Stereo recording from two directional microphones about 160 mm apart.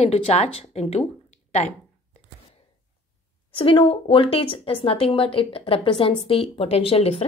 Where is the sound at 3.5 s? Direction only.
35° left (ahead or behind).